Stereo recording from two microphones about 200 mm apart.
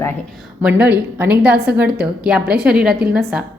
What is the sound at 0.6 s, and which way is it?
A woman's voice, 5° right (ahead or behind).